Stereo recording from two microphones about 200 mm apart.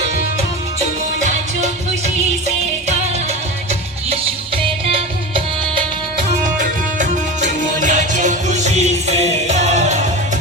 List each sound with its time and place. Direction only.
4.1 s music: 30° right (ahead or behind)
6.6 s music: 40° right (ahead or behind)